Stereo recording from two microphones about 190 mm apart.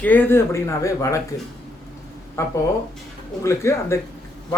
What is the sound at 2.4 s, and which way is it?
Speech, 15° left (ahead or behind).